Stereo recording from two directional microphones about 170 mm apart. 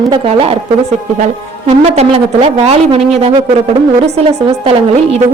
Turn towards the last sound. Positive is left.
turn(degrees=-35)  # may be behind; listen again after turning